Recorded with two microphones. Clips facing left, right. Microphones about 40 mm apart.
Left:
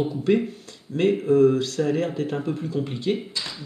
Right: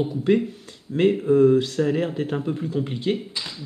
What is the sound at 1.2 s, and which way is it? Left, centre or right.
Speech, centre.